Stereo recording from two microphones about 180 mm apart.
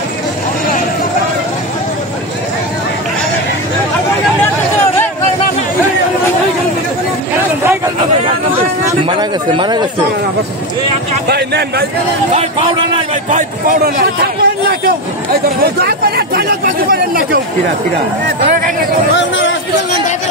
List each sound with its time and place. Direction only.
9.5 s speech: 25° right (ahead or behind)
11.2 s speech: 65° right (ahead or behind)
13.3 s a man's voice: 50° right (ahead or behind)
19.1 s a sound: 85° left